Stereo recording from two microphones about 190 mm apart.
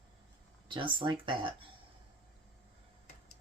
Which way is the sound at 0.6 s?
25° right (ahead or behind).